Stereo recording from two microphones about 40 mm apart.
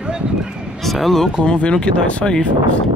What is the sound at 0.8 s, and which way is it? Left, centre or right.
Speech, centre.